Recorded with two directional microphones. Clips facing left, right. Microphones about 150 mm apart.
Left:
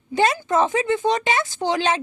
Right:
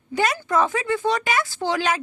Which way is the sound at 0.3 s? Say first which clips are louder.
Left 2 dB; 20° left (ahead or behind).